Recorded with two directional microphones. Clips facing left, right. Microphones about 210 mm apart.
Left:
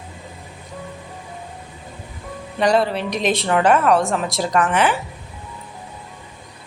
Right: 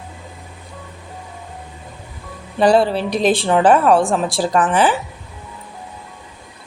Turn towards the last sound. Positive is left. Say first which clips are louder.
# right 2 dB
turn(degrees=-35)  # may be behind; listen again after turning